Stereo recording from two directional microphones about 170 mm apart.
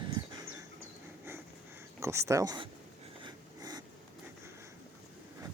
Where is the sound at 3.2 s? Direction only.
25° right (ahead or behind).